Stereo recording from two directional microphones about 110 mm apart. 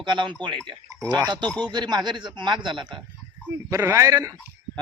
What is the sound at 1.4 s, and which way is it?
Speech, 5° left (ahead or behind).